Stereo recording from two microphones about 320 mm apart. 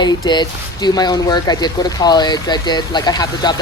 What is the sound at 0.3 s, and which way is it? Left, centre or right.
Speech, centre.